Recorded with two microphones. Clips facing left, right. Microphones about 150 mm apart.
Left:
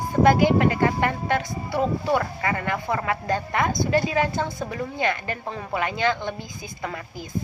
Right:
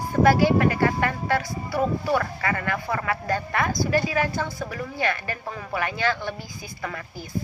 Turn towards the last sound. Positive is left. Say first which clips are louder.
# left 1 dB
turn(degrees=20)  # may be behind; listen again after turning